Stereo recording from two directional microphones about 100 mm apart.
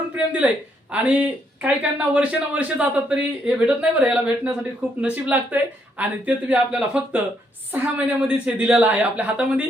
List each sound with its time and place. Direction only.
0.2 s speech: 15° right (ahead or behind)